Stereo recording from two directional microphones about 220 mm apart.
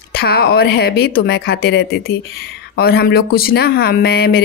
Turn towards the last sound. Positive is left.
turn(degrees=45)  # may be behind; listen again after turning